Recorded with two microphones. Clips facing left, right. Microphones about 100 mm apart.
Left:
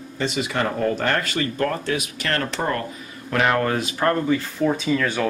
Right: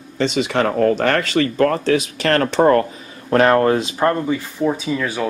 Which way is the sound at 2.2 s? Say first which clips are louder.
Right 8 dB; 55° right (ahead or behind).